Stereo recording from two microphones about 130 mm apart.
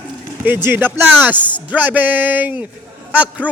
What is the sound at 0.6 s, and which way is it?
A man's voice, 15° right (ahead or behind).